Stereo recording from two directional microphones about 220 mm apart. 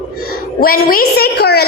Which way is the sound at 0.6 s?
40° left (ahead or behind).